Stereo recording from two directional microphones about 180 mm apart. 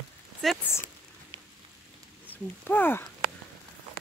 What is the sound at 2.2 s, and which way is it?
Speech, 10° left (ahead or behind).